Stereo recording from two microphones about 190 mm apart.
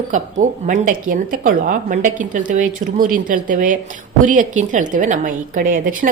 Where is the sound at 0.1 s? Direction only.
40° right (ahead or behind).